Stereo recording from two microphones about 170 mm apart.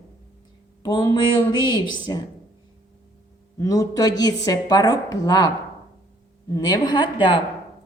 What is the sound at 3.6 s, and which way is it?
A woman's voice, 20° left (ahead or behind).